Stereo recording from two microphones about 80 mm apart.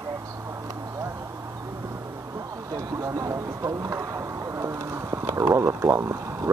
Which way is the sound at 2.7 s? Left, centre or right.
Right.